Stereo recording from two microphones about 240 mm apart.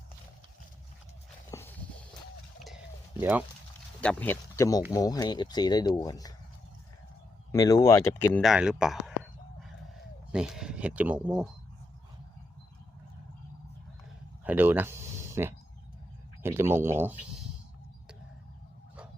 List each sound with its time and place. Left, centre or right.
1.5 s a sound: centre
3.2 s speech: centre
4.0 s speech: centre
7.5 s speech: centre
8.4 s speech: centre
9.6 s a sound: centre
14.4 s speech: centre